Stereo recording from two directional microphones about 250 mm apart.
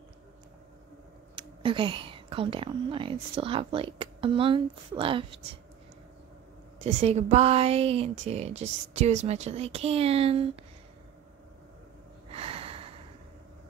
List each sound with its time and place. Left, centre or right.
1.3 s a woman's voice: centre
6.8 s a woman's voice: right
12.3 s snort: right